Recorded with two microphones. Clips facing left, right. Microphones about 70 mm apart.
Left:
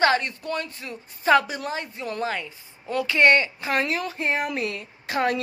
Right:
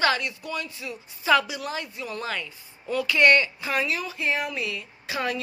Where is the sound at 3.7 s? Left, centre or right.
Left.